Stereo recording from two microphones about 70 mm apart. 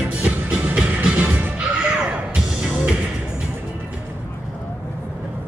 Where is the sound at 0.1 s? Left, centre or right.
Centre.